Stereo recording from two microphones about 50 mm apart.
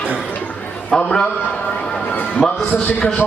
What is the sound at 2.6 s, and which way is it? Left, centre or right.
Speech, left.